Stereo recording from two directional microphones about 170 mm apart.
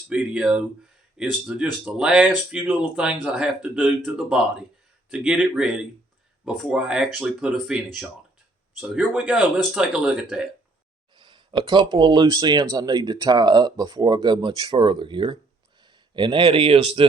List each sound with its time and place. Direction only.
0.1 s speech: 5° right (ahead or behind)
11.2 s speech: 25° right (ahead or behind)